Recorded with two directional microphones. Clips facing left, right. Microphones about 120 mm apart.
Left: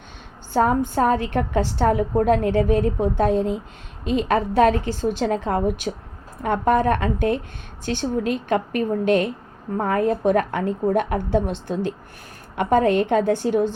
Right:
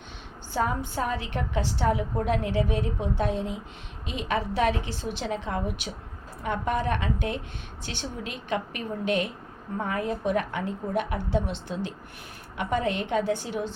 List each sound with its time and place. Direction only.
0.5 s a woman's voice: 50° left (ahead or behind)